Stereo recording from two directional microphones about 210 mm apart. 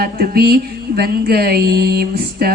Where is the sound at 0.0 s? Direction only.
45° right (ahead or behind).